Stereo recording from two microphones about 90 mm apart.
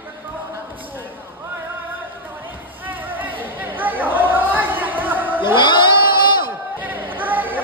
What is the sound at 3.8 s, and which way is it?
Chatter, 20° right (ahead or behind).